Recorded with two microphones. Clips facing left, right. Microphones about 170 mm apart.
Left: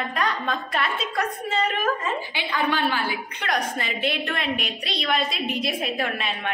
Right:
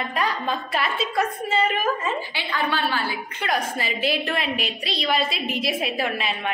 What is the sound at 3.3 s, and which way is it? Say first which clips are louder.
A woman's voice: right 2 dB; 5° right (ahead or behind).